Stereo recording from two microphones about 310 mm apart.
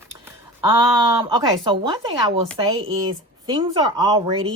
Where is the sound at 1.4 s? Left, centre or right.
Centre.